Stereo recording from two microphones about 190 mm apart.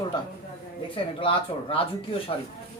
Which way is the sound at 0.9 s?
30° left (ahead or behind).